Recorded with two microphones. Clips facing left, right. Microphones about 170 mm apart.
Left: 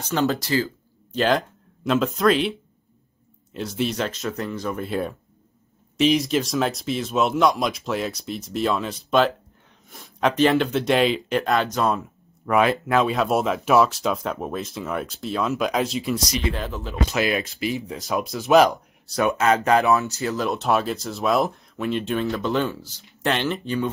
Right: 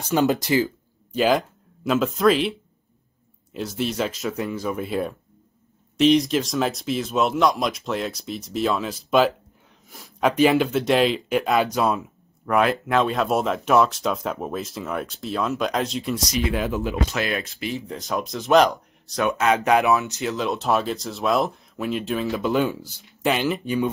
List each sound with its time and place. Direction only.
0.0 s speech: 15° right (ahead or behind)
1.1 s speech: 5° right (ahead or behind)
3.5 s speech: centre (ahead or behind)
17.1 s speech: 5° left (ahead or behind); by 23.9 s 10° right (ahead or behind)